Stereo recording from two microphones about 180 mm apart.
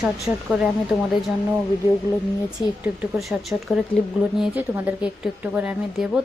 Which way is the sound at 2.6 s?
25° left (ahead or behind).